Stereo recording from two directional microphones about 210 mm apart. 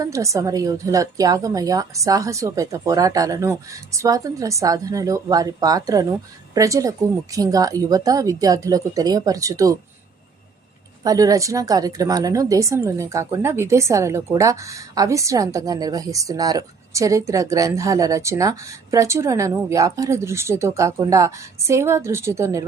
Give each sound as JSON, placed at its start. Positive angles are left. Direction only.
{"t": 0.0, "sound": "speech", "side_deg": -15}
{"t": 11.0, "sound": "speech", "side_deg": -15}